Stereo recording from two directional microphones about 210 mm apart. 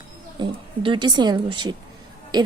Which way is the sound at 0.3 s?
20° right (ahead or behind).